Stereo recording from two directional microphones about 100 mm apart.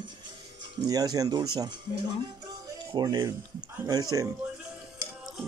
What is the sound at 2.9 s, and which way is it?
Speech, 40° right (ahead or behind).